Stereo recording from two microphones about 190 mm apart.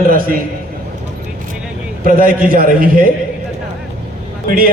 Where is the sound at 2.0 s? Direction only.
50° right (ahead or behind).